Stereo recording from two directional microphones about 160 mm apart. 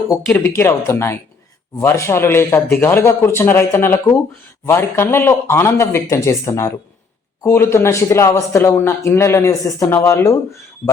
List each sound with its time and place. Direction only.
0.3 s speech: 15° left (ahead or behind)